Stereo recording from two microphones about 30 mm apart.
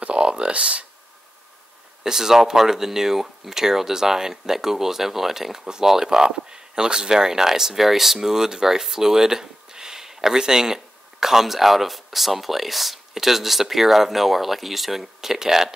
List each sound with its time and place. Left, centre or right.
0.0 s a sound: right
2.0 s speech: centre
5.6 s speech: right; by 15.0 s centre
15.1 s speech: centre